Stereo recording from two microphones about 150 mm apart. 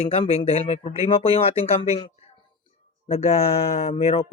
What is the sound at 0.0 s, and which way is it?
Speech, 40° left (ahead or behind).